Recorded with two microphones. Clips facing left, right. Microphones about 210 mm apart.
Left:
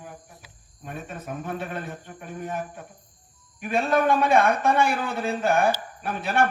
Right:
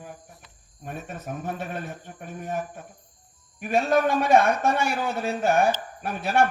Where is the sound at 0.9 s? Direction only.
55° left (ahead or behind).